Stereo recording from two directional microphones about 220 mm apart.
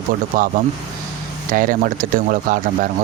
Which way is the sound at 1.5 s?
40° right (ahead or behind).